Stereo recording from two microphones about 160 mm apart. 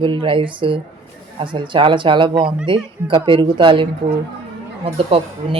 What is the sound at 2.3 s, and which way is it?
Speech, 5° right (ahead or behind).